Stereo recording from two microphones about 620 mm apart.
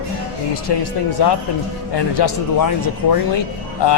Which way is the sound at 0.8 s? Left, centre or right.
Left.